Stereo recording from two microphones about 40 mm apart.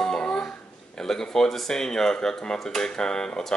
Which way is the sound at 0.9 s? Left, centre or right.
Centre.